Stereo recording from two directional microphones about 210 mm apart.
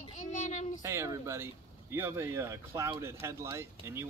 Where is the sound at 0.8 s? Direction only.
15° right (ahead or behind).